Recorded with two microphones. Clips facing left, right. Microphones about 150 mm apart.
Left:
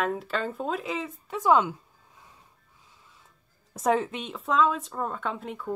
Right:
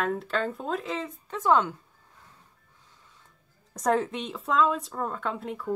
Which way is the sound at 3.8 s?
5° left (ahead or behind).